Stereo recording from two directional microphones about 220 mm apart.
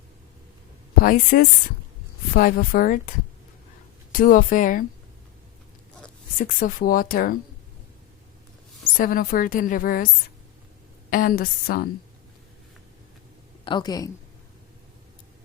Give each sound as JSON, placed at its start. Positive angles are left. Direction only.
{"t": 1.0, "sound": "a woman's voice", "side_deg": 40}
{"t": 6.4, "sound": "a woman's voice", "side_deg": 40}
{"t": 9.0, "sound": "a woman's voice", "side_deg": 40}
{"t": 11.1, "sound": "a woman's voice", "side_deg": 40}
{"t": 13.7, "sound": "a woman's voice", "side_deg": 20}